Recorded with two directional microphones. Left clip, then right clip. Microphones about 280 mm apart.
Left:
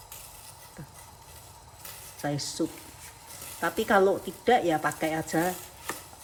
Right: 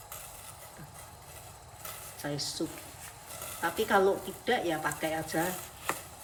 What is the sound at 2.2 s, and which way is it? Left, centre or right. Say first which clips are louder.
Speech: left 4 dB; centre.